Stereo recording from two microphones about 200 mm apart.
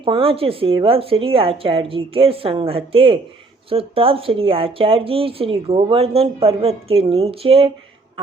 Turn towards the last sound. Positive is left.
turn(degrees=-30)  # may be behind; listen again after turning